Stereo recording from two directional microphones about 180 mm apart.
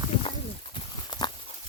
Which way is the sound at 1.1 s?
25° left (ahead or behind).